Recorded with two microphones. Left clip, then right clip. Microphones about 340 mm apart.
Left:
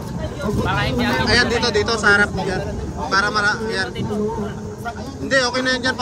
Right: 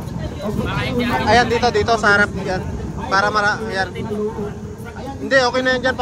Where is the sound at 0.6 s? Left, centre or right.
Left.